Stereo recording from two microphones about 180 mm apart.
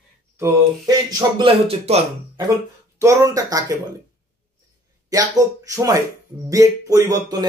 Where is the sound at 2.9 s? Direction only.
15° right (ahead or behind).